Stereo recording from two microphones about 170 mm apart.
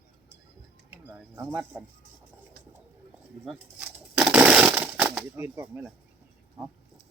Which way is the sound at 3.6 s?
5° right (ahead or behind).